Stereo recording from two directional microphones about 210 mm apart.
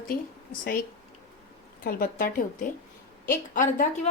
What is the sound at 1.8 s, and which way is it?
A woman's voice, 40° left (ahead or behind).